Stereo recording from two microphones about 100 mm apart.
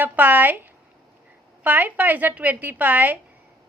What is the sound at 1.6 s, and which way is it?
A woman's voice, 15° right (ahead or behind).